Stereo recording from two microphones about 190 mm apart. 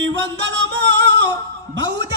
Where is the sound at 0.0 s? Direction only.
70° right (ahead or behind).